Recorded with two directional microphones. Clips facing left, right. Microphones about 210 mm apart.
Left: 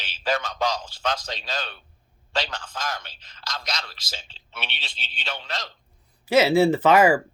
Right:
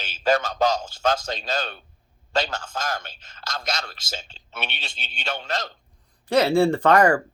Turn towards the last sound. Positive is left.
turn(degrees=5)  # may be behind; listen again after turning